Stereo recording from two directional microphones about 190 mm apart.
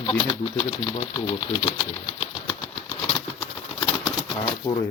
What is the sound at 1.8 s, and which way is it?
Bird flight, 25° left (ahead or behind).